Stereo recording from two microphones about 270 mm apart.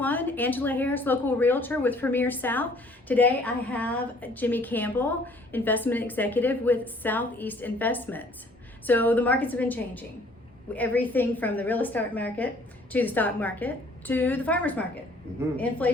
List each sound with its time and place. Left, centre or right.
0.0 s a woman's voice: centre